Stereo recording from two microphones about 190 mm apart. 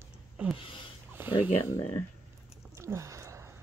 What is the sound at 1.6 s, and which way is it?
Speech, 15° left (ahead or behind).